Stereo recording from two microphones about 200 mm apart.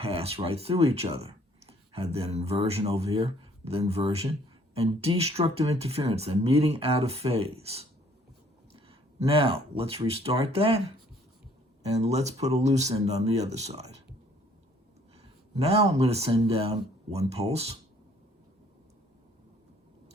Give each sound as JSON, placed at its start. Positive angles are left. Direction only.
{"t": 0.0, "sound": "speech", "side_deg": -30}
{"t": 8.9, "sound": "speech", "side_deg": -25}
{"t": 11.9, "sound": "speech", "side_deg": -30}
{"t": 15.5, "sound": "speech", "side_deg": -30}